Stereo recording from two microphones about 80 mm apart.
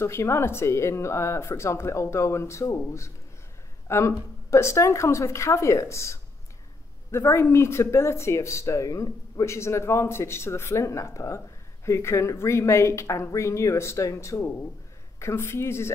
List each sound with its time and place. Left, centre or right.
0.0 s speech: left